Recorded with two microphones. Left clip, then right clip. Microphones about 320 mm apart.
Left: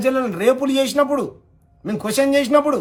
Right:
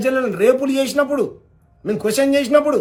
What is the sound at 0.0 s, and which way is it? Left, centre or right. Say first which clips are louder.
A man's voice: right 2 dB; centre.